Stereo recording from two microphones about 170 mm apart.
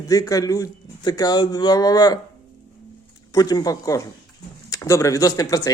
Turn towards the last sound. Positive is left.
turn(degrees=20)  # may be behind; listen again after turning